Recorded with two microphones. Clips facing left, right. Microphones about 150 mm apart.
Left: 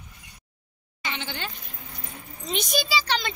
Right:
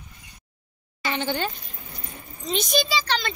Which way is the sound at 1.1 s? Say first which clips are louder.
Right 10 dB; 45° right (ahead or behind).